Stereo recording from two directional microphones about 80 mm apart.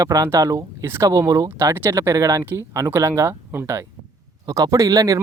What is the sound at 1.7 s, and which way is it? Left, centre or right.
Speech, right.